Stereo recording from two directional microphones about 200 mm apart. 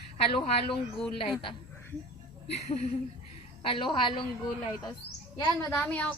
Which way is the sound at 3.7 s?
25° left (ahead or behind).